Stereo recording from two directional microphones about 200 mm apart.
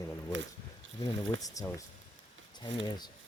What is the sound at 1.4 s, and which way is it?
Speech, 15° left (ahead or behind).